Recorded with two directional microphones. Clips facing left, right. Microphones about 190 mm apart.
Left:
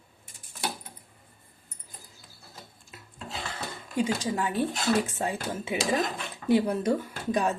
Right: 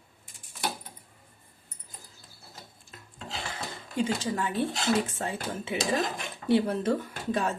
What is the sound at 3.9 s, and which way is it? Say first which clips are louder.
Speech: left 1 dB; 15° left (ahead or behind).